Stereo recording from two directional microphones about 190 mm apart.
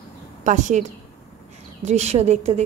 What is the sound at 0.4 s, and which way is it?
Speech, 40° right (ahead or behind).